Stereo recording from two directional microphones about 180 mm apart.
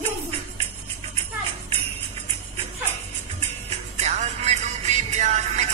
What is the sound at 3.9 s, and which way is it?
Music, 40° right (ahead or behind).